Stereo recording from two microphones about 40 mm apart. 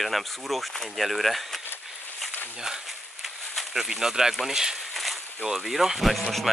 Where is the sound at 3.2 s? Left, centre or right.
Centre.